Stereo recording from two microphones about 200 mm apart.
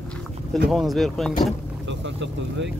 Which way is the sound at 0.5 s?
Centre (ahead or behind).